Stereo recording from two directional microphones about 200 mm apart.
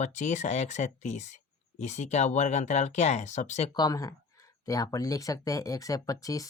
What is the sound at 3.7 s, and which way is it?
Speech, 20° left (ahead or behind).